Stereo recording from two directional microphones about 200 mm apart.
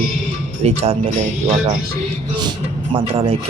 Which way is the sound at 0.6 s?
30° right (ahead or behind).